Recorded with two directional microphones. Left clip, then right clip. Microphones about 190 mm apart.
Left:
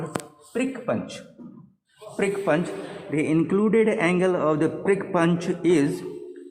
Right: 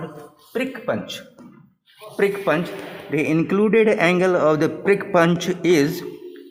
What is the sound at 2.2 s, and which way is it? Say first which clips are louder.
Speech: right 3 dB; 30° right (ahead or behind).